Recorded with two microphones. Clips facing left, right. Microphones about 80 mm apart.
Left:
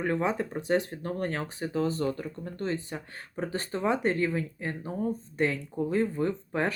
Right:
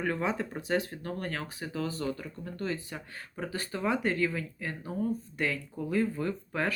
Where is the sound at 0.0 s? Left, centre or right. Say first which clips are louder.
Left 3 dB; left.